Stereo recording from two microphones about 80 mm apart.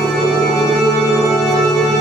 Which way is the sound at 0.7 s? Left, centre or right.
Centre.